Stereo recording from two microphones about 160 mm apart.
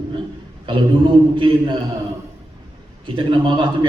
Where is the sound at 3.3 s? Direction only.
30° right (ahead or behind).